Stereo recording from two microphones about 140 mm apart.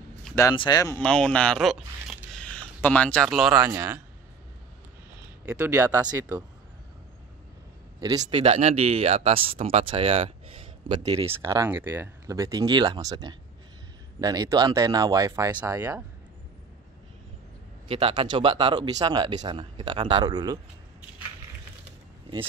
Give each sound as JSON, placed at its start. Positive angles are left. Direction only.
{"t": 0.6, "sound": "speech", "side_deg": 30}
{"t": 0.9, "sound": "speech", "side_deg": 5}
{"t": 3.7, "sound": "speech", "side_deg": -15}
{"t": 5.4, "sound": "speech", "side_deg": -20}
{"t": 8.3, "sound": "speech", "side_deg": -45}
{"t": 10.9, "sound": "speech", "side_deg": -30}
{"t": 17.8, "sound": "speech", "side_deg": -40}